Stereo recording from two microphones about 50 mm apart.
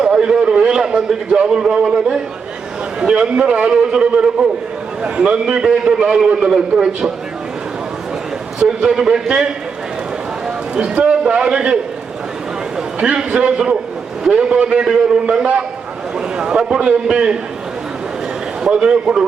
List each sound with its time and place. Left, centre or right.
0.0 s a man's voice: centre
8.5 s a man's voice: centre
10.8 s a man's voice: centre
18.7 s a man's voice: centre